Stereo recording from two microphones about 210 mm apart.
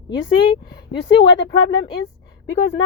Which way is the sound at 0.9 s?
60° left (ahead or behind).